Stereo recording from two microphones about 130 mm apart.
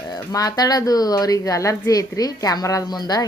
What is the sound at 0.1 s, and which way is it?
Speech, 30° left (ahead or behind).